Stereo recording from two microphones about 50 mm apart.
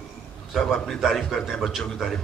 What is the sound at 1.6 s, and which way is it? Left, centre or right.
Speech, centre.